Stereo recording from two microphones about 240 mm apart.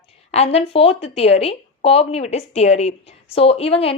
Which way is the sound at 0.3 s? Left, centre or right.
Left.